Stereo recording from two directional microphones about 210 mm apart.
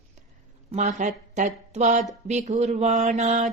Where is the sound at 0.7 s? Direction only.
35° right (ahead or behind).